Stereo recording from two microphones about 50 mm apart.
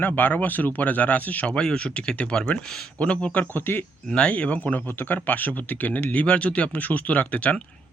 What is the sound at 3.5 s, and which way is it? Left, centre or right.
Speech, left.